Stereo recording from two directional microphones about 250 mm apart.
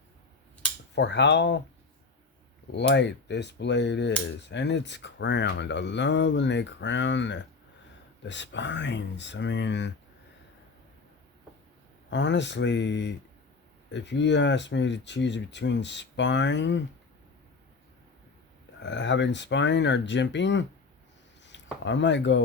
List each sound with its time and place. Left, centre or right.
0.9 s speech: left
2.7 s speech: left
12.1 s speech: left
18.8 s speech: left